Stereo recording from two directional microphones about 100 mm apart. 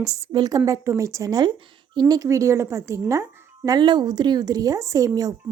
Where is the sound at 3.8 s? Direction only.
50° right (ahead or behind).